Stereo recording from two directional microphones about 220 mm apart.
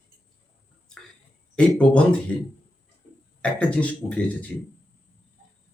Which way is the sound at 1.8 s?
5° left (ahead or behind).